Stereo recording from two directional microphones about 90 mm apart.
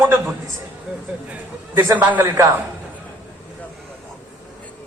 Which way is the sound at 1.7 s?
25° right (ahead or behind).